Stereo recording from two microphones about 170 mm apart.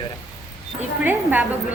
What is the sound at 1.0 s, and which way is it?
Speech, 10° right (ahead or behind).